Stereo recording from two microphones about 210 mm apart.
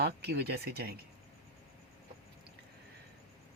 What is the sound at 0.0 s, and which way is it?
Speech, 50° right (ahead or behind).